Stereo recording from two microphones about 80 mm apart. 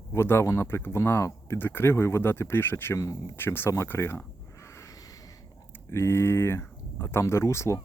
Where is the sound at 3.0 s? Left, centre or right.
Left.